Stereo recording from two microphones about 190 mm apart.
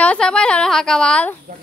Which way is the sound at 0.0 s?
5° left (ahead or behind).